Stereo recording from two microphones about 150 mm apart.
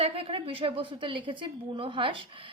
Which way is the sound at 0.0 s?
40° right (ahead or behind).